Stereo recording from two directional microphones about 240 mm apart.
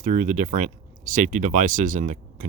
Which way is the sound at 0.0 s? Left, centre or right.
Right.